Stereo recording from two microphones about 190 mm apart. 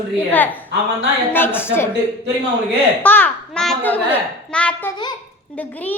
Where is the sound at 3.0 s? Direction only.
10° left (ahead or behind).